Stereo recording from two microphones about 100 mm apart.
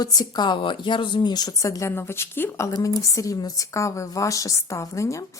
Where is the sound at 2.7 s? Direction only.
35° left (ahead or behind).